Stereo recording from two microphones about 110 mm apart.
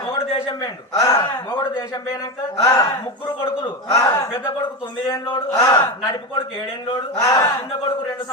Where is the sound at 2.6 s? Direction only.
35° left (ahead or behind).